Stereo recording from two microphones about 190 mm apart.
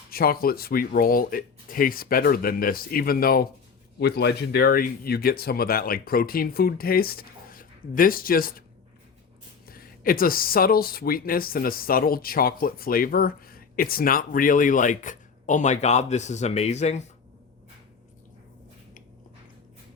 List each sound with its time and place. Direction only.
0.1 s speech: 50° left (ahead or behind)
9.6 s speech: 50° left (ahead or behind)